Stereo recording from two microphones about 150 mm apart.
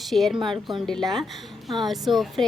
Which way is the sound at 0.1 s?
Centre (ahead or behind).